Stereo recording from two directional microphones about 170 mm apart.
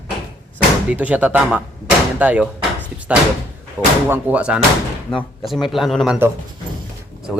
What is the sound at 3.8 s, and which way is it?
Speech, 10° right (ahead or behind).